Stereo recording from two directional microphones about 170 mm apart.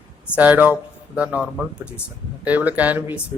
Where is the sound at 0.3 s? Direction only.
10° right (ahead or behind).